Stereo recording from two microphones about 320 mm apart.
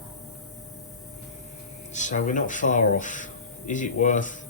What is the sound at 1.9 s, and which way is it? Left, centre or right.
A man's voice, left.